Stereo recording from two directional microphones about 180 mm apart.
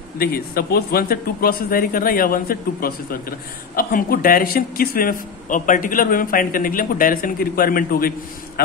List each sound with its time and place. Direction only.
0.2 s speech: 60° left (ahead or behind)